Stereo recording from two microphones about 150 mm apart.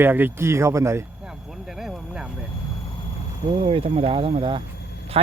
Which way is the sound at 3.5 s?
35° right (ahead or behind).